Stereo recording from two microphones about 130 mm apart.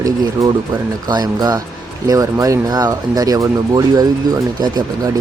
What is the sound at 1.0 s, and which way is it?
Speech, 30° right (ahead or behind).